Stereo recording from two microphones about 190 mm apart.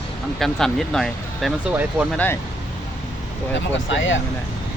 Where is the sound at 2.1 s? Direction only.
10° left (ahead or behind).